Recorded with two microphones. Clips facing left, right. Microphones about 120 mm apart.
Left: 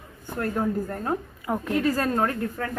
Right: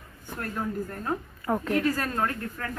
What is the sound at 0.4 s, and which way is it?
Speech, 30° left (ahead or behind).